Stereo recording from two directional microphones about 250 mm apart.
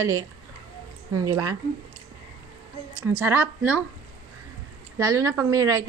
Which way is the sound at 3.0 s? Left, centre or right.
Centre.